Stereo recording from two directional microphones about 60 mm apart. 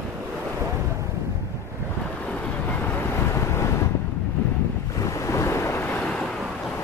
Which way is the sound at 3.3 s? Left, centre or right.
Left.